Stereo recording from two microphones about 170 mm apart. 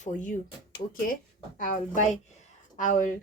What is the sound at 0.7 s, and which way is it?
Speech, 55° left (ahead or behind).